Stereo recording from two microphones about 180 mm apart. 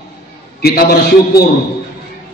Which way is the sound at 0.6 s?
60° left (ahead or behind).